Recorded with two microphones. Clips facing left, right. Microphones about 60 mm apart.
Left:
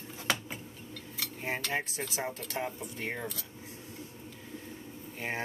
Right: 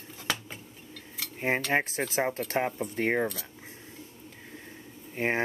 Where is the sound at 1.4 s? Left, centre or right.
Right.